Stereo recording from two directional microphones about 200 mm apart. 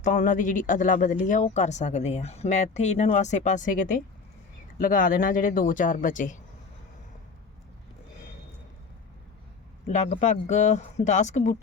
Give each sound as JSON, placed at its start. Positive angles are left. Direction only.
{"t": 0.0, "sound": "speech", "side_deg": 40}
{"t": 9.8, "sound": "speech", "side_deg": 35}